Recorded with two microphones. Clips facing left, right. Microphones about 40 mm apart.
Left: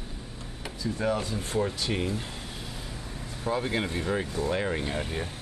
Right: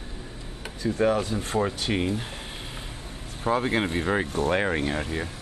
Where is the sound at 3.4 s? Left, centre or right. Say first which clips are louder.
Right 5 dB; right.